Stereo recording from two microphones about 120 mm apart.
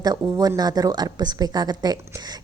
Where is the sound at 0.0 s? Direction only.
30° right (ahead or behind).